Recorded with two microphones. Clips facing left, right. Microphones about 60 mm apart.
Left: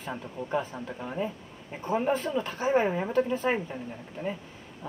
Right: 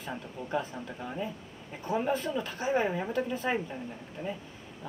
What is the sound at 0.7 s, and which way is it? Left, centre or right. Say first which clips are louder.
Speech: left 2 dB; centre.